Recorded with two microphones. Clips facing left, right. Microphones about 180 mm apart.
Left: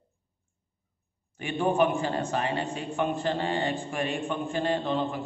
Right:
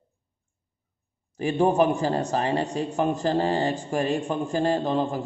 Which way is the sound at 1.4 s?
40° right (ahead or behind).